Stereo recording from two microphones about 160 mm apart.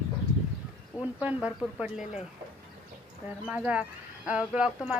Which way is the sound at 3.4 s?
10° right (ahead or behind).